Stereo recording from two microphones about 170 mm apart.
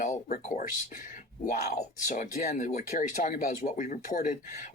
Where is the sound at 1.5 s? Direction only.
50° left (ahead or behind).